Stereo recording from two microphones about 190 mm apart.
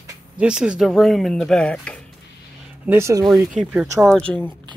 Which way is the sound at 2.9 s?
15° right (ahead or behind).